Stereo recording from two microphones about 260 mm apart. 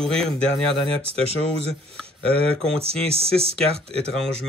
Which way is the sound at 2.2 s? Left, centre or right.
Right.